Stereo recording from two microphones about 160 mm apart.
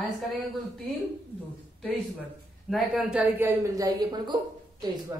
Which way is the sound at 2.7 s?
5° right (ahead or behind).